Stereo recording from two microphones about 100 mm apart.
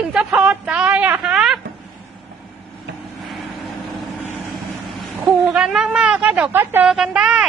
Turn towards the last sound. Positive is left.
turn(degrees=-15)  # may be behind; listen again after turning